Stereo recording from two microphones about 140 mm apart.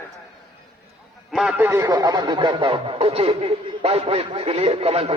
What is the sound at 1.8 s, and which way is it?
A man's voice, 30° right (ahead or behind).